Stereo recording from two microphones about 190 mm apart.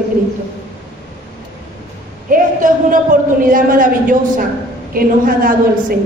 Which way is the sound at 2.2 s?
45° right (ahead or behind).